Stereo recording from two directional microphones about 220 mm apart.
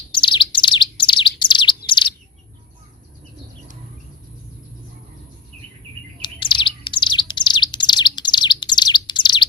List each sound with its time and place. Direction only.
0.1 s bird: 20° left (ahead or behind)
1.9 s chirp: 20° left (ahead or behind)
6.2 s bird: 20° left (ahead or behind)